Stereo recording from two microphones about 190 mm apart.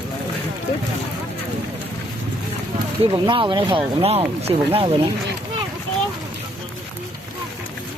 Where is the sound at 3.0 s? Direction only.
25° right (ahead or behind).